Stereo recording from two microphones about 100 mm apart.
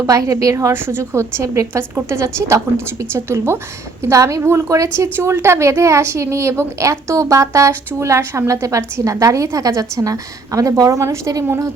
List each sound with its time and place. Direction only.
0.0 s a woman's voice: 35° right (ahead or behind)